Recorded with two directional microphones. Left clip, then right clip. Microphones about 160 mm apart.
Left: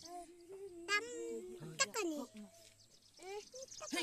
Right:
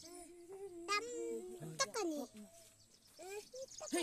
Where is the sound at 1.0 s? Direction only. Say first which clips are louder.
Right 1 dB; 10° left (ahead or behind).